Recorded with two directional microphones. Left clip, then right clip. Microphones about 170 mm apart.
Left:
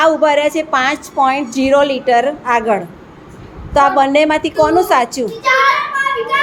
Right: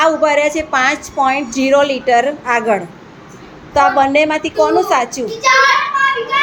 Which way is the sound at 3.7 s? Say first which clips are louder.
Even; 10° left (ahead or behind).